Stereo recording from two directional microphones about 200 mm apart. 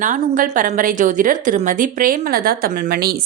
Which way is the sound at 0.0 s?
40° right (ahead or behind).